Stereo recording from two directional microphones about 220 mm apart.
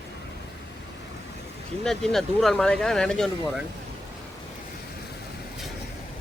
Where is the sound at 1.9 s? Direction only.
Centre (ahead or behind).